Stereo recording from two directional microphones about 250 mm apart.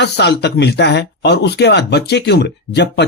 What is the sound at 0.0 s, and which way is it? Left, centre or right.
Speech, left.